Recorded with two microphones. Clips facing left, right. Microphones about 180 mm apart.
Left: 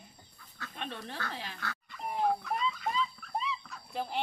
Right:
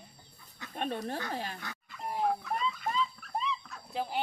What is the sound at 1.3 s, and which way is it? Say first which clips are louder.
Speech: right 5 dB; 45° right (ahead or behind).